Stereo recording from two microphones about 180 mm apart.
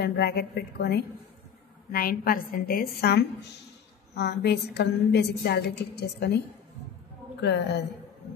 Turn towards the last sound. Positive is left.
turn(degrees=70)  # may be behind; listen again after turning